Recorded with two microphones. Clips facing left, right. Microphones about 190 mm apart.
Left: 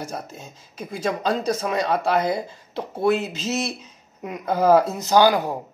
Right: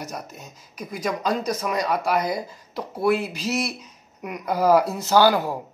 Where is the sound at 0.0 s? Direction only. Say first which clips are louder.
Left 2 dB; 30° left (ahead or behind).